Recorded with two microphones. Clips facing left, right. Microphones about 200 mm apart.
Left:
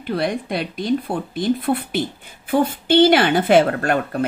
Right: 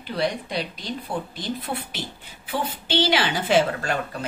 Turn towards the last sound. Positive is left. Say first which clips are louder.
# left 7 dB
turn(degrees=55)  # may be behind; listen again after turning